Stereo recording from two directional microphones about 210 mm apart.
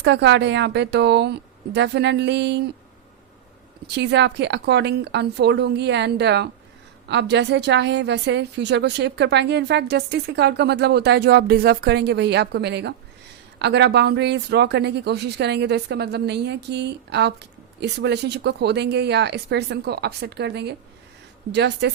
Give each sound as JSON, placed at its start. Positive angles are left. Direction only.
{"t": 0.0, "sound": "a woman's voice", "side_deg": -55}
{"t": 3.8, "sound": "a woman's voice", "side_deg": -55}